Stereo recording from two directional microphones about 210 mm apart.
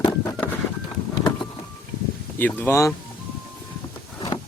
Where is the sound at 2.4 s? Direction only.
10° left (ahead or behind).